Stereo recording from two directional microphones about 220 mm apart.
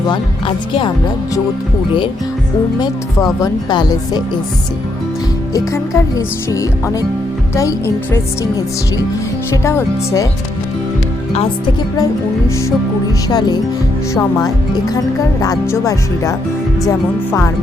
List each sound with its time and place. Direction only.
0.1 s speech: 20° left (ahead or behind)
2.8 s speech: 15° left (ahead or behind)
5.5 s speech: 15° left (ahead or behind)
9.6 s speech: 10° left (ahead or behind)
13.2 s speech: 20° left (ahead or behind)